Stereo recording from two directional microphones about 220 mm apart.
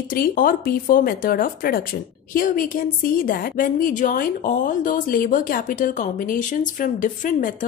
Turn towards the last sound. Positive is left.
turn(degrees=35)  # may be behind; listen again after turning